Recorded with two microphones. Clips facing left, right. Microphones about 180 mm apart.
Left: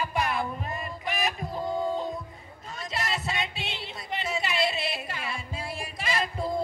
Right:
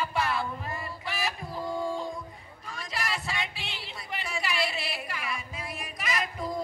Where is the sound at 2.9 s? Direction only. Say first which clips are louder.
Left 2 dB; 25° left (ahead or behind).